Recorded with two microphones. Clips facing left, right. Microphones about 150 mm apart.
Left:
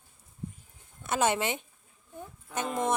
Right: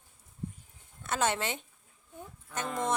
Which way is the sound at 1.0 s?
10° left (ahead or behind).